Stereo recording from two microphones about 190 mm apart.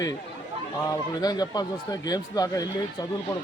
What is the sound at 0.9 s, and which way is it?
Speech, 20° left (ahead or behind).